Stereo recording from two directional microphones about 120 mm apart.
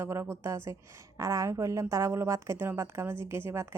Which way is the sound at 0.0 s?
20° right (ahead or behind).